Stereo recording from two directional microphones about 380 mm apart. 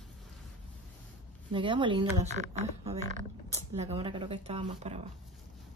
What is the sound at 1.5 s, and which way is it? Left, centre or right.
Speech, centre.